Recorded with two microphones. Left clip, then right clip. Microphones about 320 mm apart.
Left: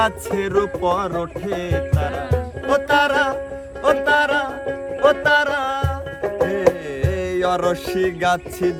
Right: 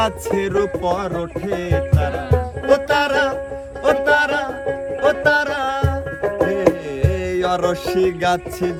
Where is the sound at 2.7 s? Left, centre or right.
Centre.